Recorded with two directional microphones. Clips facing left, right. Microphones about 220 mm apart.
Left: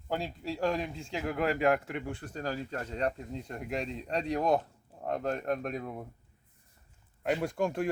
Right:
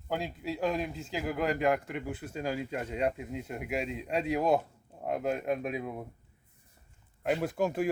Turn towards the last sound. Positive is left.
turn(degrees=-5)  # may be behind; listen again after turning